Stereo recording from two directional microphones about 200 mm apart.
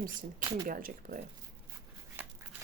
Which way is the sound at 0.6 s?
45° right (ahead or behind).